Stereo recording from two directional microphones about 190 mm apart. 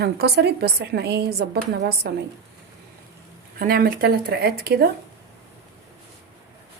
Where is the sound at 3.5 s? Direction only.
50° right (ahead or behind).